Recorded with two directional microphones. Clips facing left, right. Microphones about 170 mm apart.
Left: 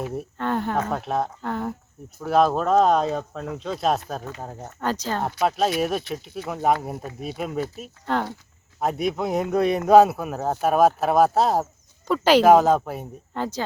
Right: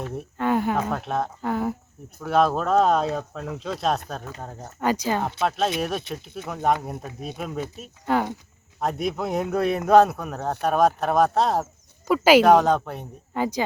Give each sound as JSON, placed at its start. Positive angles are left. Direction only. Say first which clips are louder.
{"t": 0.0, "sound": "speech", "louder": "left 2 dB", "side_deg": 0}
{"t": 0.3, "sound": "snake", "louder": "right 3 dB", "side_deg": -10}
{"t": 0.9, "sound": "speech", "louder": "left 1 dB", "side_deg": 5}
{"t": 4.8, "sound": "speech", "louder": "right 3 dB", "side_deg": -10}
{"t": 5.4, "sound": "speech", "louder": "left 2 dB", "side_deg": 0}
{"t": 8.0, "sound": "speech", "louder": "right 2 dB", "side_deg": -10}
{"t": 8.8, "sound": "speech", "louder": "left 2 dB", "side_deg": 0}
{"t": 12.0, "sound": "speech", "louder": "right 2 dB", "side_deg": -10}
{"t": 12.5, "sound": "speech", "louder": "left 2 dB", "side_deg": 5}
{"t": 13.3, "sound": "speech", "louder": "right 3 dB", "side_deg": -10}